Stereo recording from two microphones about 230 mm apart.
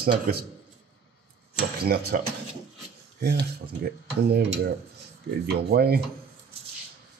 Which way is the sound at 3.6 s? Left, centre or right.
Right.